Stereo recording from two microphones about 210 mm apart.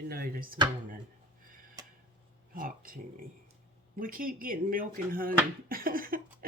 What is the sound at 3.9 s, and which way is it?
Speech, 40° right (ahead or behind).